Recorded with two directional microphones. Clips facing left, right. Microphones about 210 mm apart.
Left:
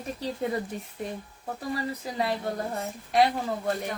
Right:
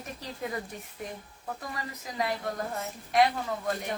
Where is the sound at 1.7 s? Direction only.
30° left (ahead or behind).